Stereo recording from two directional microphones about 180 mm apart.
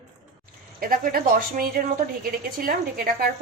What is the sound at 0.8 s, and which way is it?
A woman's voice, 55° right (ahead or behind).